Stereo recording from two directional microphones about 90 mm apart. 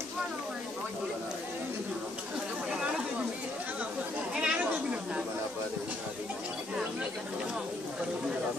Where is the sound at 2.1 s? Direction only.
10° right (ahead or behind).